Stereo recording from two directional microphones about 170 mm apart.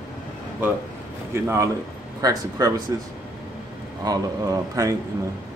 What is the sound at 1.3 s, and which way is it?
Speech, 15° right (ahead or behind).